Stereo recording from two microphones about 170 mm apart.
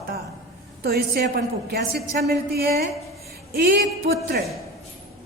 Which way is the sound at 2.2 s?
65° right (ahead or behind).